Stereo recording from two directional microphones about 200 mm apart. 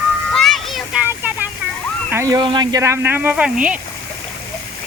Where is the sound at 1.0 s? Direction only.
10° right (ahead or behind).